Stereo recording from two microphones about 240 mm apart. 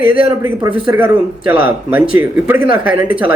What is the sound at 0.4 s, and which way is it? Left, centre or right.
A man's voice, centre.